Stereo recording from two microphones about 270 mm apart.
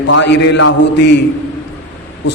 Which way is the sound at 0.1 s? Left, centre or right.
Left.